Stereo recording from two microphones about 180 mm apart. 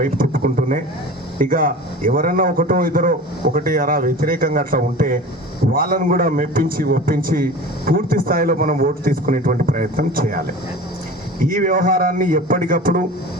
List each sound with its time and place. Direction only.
0.0 s a man's voice: 50° right (ahead or behind)
11.4 s a man's voice: 50° right (ahead or behind)